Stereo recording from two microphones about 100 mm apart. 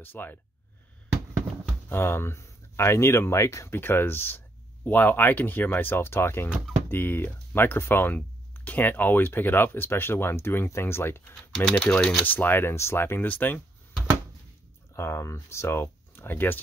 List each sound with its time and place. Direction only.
0.0 s speech: 20° left (ahead or behind)
1.9 s speech: 25° left (ahead or behind)
11.7 s speech: 10° left (ahead or behind)
12.3 s speech: 20° left (ahead or behind)
15.0 s speech: 30° left (ahead or behind)